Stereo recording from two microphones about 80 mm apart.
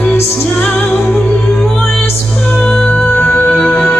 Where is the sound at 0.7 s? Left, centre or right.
Left.